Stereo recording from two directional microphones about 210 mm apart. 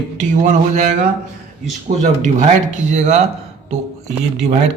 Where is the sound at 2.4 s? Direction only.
35° right (ahead or behind).